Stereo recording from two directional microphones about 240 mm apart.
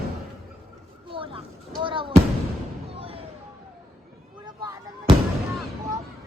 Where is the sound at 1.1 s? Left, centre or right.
Right.